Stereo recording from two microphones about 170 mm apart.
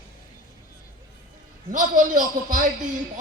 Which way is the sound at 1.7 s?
50° right (ahead or behind).